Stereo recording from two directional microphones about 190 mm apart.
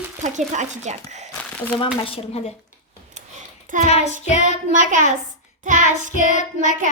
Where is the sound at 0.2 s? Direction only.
40° right (ahead or behind).